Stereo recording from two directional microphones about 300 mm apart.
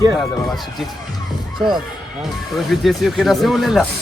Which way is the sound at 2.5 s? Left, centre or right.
Centre.